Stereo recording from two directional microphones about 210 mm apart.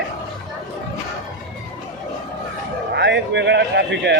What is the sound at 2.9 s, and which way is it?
Speech, 55° right (ahead or behind).